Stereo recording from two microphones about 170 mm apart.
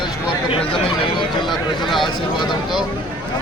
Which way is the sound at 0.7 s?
30° left (ahead or behind).